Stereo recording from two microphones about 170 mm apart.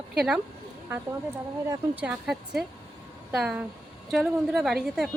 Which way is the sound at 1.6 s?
10° right (ahead or behind).